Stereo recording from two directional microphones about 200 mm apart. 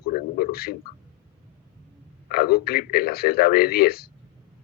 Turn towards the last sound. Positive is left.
turn(degrees=50)  # may be behind; listen again after turning